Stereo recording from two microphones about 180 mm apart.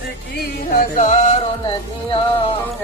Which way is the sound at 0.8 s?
40° left (ahead or behind).